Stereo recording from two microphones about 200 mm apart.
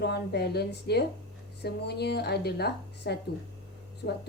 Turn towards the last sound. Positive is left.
turn(degrees=50)  # may be behind; listen again after turning